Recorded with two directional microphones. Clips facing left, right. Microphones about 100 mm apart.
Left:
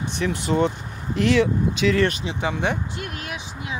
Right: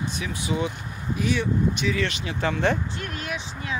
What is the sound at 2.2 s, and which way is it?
Speech, 15° left (ahead or behind).